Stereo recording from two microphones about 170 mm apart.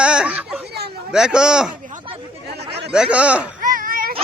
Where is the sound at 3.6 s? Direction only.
55° right (ahead or behind).